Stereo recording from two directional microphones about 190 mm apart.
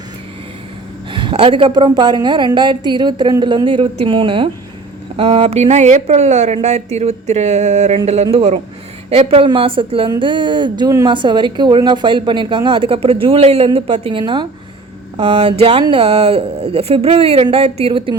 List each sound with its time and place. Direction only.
1.1 s a woman's voice: 25° right (ahead or behind)